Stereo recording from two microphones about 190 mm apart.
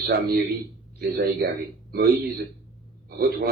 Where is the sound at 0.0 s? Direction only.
55° right (ahead or behind).